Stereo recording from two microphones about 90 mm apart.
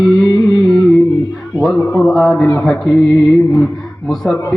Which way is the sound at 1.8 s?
40° left (ahead or behind).